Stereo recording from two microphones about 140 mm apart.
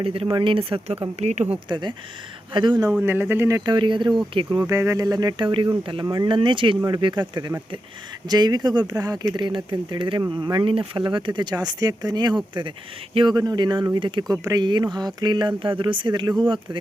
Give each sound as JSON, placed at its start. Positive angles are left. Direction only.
{"t": 0.0, "sound": "speech", "side_deg": -40}
{"t": 1.2, "sound": "speech", "side_deg": -55}
{"t": 1.5, "sound": "speech", "side_deg": -35}
{"t": 3.0, "sound": "speech", "side_deg": -15}
{"t": 3.7, "sound": "speech", "side_deg": -35}
{"t": 4.6, "sound": "speech", "side_deg": -20}